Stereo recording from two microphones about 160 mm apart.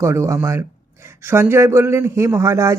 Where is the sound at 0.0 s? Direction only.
15° right (ahead or behind).